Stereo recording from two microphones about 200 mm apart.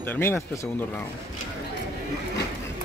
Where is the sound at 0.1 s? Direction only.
10° left (ahead or behind).